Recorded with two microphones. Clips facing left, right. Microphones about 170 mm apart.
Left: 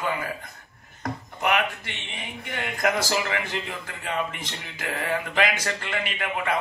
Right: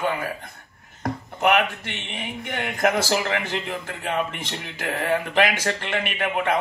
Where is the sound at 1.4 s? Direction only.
55° right (ahead or behind).